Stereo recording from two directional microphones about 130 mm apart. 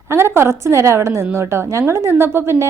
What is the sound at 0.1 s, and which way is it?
A woman's voice, 20° right (ahead or behind).